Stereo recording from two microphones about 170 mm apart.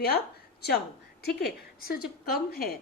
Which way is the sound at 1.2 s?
70° left (ahead or behind).